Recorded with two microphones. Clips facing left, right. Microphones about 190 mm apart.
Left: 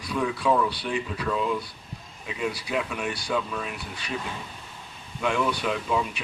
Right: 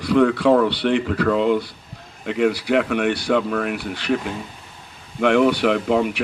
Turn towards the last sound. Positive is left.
turn(degrees=-65)  # may be behind; listen again after turning